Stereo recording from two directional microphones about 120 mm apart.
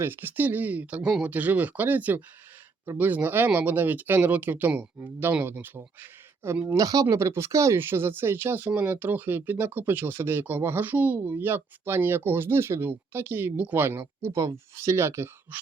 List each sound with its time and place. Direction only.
0.0 s speech: 15° right (ahead or behind)
6.8 s speech: 30° right (ahead or behind)